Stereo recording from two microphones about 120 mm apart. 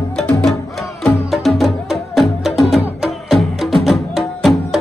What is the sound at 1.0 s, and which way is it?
Music, 5° left (ahead or behind).